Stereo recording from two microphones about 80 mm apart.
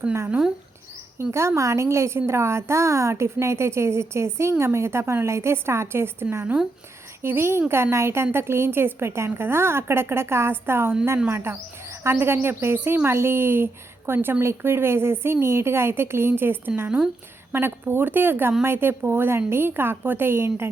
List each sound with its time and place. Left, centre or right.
0.3 s speech: centre
1.2 s a woman's voice: right